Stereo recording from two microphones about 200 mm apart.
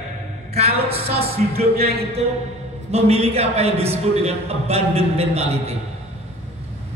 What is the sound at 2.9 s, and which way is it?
A man's voice, 30° right (ahead or behind).